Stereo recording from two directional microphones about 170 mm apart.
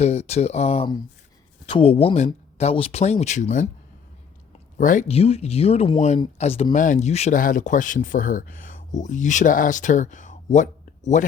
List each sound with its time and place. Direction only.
0.0 s speech: 40° left (ahead or behind)
4.8 s speech: 50° left (ahead or behind)
5.0 s speech: 35° left (ahead or behind)